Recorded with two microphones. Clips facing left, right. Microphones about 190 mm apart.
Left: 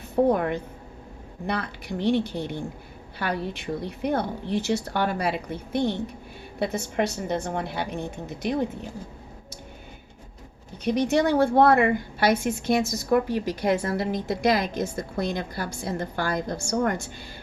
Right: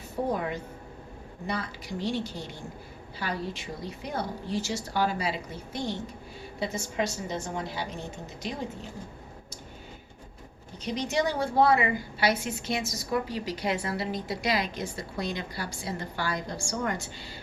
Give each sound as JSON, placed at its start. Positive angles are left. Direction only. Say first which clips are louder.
{"t": 0.3, "sound": "a woman's voice", "louder": "left 7 dB", "side_deg": 60}
{"t": 10.8, "sound": "a woman's voice", "louder": "left 7 dB", "side_deg": 55}